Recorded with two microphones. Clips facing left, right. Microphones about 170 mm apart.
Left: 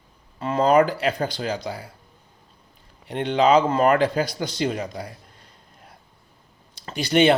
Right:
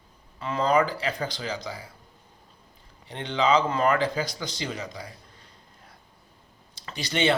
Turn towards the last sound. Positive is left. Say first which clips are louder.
# left 8 dB
turn(degrees=55)  # may be behind; listen again after turning